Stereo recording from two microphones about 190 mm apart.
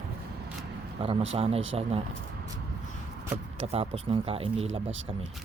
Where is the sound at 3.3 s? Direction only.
30° right (ahead or behind).